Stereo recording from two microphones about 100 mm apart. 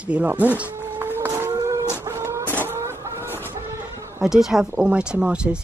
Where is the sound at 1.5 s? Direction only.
35° right (ahead or behind).